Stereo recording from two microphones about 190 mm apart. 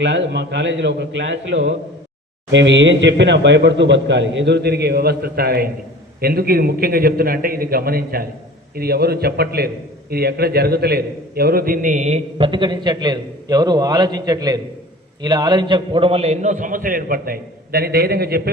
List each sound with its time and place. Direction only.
0.0 s a man's voice: 70° right (ahead or behind)